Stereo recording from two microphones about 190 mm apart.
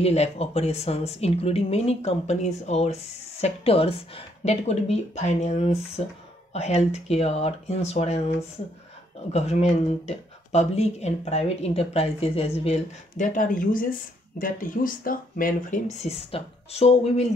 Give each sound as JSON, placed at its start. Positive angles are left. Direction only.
{"t": 0.0, "sound": "speech", "side_deg": 35}
{"t": 9.3, "sound": "speech", "side_deg": 35}